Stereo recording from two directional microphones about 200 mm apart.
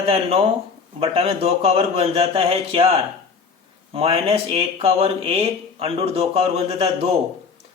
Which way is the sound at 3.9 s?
30° right (ahead or behind).